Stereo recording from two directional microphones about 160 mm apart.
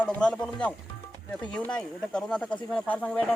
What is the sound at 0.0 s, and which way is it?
Speech, 5° left (ahead or behind).